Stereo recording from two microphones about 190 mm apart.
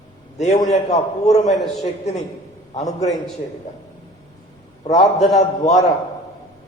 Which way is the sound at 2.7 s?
35° left (ahead or behind).